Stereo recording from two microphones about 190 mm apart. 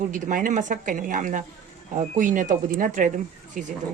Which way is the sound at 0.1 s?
45° right (ahead or behind).